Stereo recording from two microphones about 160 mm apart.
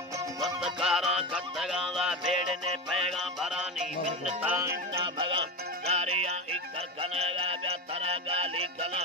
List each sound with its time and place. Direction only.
0.4 s music: 5° right (ahead or behind)
4.4 s music: 15° right (ahead or behind)
5.0 s music: 35° right (ahead or behind)